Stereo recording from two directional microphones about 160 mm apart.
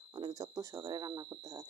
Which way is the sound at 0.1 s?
25° right (ahead or behind).